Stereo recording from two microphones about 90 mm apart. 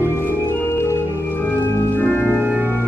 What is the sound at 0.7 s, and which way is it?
Organ, 30° left (ahead or behind).